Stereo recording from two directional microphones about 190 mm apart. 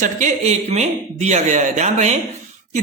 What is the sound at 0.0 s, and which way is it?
Speech, 40° right (ahead or behind).